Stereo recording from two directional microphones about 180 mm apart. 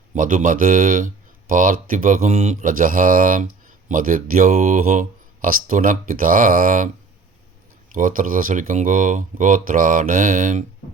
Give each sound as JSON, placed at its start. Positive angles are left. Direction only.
{"t": 0.1, "sound": "speech", "side_deg": -45}
{"t": 7.9, "sound": "speech", "side_deg": -50}